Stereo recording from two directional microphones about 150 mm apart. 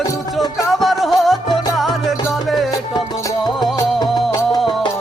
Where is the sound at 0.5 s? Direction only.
Centre (ahead or behind).